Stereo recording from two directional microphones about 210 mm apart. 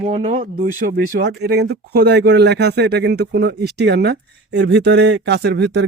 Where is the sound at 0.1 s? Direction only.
30° right (ahead or behind).